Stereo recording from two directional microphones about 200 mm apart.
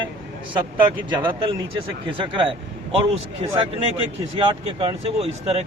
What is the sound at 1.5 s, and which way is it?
A man's voice, 25° right (ahead or behind).